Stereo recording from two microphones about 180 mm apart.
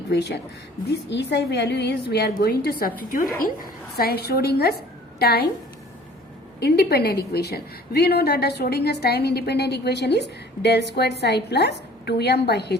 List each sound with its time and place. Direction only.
0.1 s a woman's voice: 65° left (ahead or behind)
2.6 s a woman's voice: 55° left (ahead or behind)
6.6 s a woman's voice: 60° left (ahead or behind)